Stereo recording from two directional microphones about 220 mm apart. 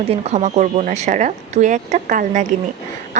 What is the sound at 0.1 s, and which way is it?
Speech, 30° right (ahead or behind).